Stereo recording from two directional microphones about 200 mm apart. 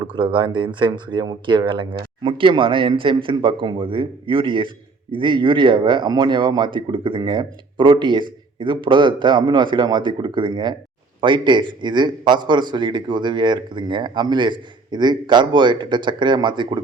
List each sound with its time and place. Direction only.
0.0 s a man's voice: 25° right (ahead or behind)